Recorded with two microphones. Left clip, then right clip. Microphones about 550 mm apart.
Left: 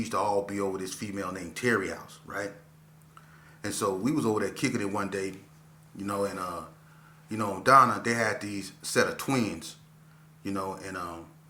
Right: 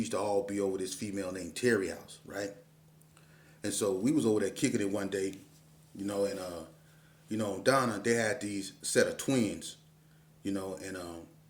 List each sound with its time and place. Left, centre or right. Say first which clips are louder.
0.0 s speech: left 4 dB; right
3.6 s speech: left 2 dB; right